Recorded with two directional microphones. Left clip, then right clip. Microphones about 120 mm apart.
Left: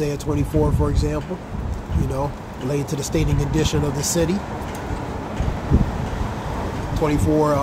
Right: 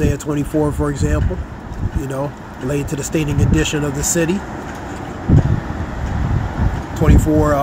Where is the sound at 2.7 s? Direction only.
20° right (ahead or behind).